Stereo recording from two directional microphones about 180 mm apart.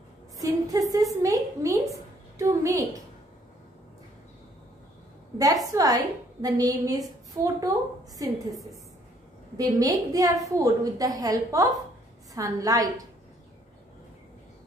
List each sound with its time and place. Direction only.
0.4 s a woman's voice: 20° right (ahead or behind)
5.4 s a woman's voice: 20° right (ahead or behind)
9.6 s a woman's voice: 20° right (ahead or behind)